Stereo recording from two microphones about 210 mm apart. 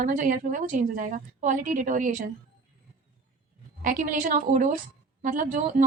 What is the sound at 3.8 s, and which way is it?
A woman's voice, 40° right (ahead or behind).